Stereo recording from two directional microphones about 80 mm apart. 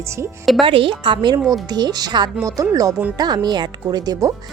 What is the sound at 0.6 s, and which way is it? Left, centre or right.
Speech, right.